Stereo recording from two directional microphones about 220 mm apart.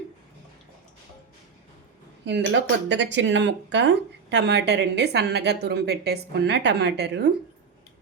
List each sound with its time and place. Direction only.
2.2 s speech: 55° right (ahead or behind)